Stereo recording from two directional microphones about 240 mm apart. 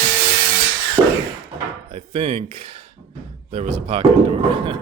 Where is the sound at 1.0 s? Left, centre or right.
Centre.